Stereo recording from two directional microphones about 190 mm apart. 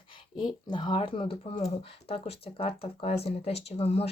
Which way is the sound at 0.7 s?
25° left (ahead or behind).